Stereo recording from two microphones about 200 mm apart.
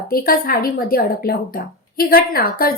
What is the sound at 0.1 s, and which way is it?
A woman's voice, 45° left (ahead or behind).